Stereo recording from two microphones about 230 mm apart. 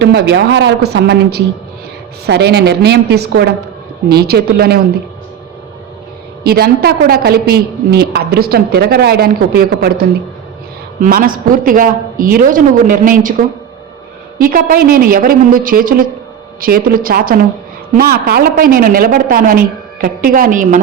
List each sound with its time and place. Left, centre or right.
0.0 s speech: right
6.4 s a woman's voice: right
14.3 s a woman's voice: right